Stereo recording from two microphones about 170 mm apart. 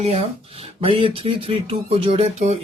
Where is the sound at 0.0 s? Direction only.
40° right (ahead or behind).